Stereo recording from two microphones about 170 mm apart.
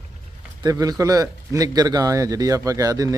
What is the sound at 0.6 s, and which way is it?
A man's voice, 20° right (ahead or behind).